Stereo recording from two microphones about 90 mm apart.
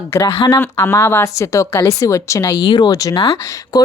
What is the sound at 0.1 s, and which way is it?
Speech, 30° left (ahead or behind).